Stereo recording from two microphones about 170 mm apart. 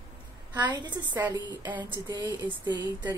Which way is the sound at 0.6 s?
25° right (ahead or behind).